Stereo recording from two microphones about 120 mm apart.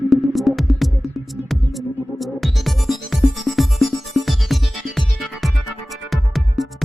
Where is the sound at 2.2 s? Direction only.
Centre (ahead or behind).